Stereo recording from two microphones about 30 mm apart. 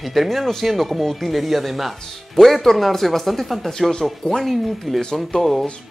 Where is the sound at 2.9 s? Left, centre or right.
Centre.